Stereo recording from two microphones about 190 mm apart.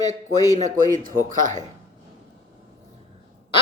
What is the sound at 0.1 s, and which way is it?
Speech, 40° right (ahead or behind).